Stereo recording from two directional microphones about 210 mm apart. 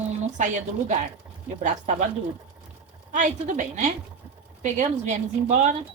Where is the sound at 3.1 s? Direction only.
40° right (ahead or behind).